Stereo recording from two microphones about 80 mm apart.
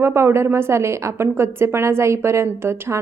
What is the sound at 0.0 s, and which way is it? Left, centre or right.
A woman's voice, right.